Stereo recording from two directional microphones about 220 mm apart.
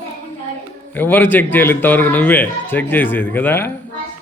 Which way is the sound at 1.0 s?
10° left (ahead or behind).